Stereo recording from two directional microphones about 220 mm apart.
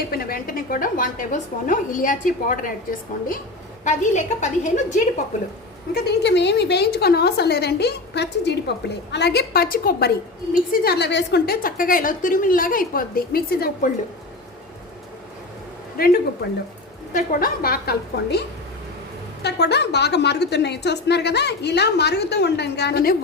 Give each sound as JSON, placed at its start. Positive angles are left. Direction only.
{"t": 0.1, "sound": "a woman's voice", "side_deg": 40}
{"t": 3.8, "sound": "a woman's voice", "side_deg": 35}
{"t": 5.9, "sound": "a woman's voice", "side_deg": 50}
{"t": 16.0, "sound": "a woman's voice", "side_deg": 45}